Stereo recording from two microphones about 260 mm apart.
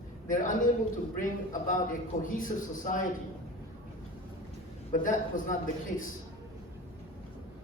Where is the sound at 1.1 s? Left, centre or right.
Left.